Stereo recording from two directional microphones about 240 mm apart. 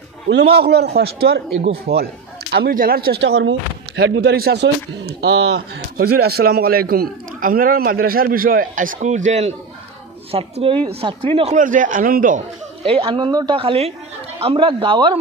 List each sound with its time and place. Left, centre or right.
0.6 s a man's voice: right; by 15.1 s centre